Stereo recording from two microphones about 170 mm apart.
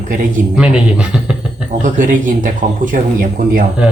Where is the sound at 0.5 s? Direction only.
5° right (ahead or behind).